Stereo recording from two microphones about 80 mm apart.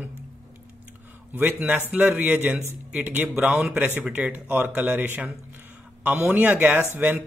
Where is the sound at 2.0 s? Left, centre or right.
Centre.